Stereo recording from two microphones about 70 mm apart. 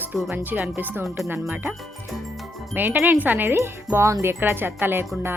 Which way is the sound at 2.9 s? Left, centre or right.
Right.